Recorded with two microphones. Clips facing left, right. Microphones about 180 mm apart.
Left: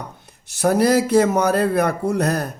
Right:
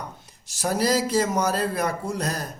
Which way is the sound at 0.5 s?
60° left (ahead or behind).